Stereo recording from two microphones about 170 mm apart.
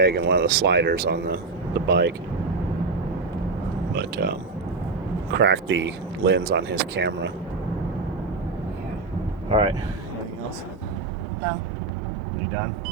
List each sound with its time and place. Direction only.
0.0 s speech: 75° right (ahead or behind)
3.9 s speech: 70° right (ahead or behind)
5.3 s speech: 90° right
9.5 s speech: 35° right (ahead or behind)